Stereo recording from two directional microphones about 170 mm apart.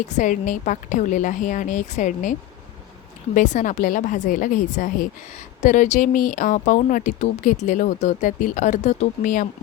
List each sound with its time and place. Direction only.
0.1 s speech: 45° left (ahead or behind)
3.3 s speech: 50° left (ahead or behind)